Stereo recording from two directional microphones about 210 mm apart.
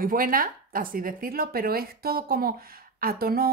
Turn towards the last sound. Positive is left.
turn(degrees=-45)  # may be behind; listen again after turning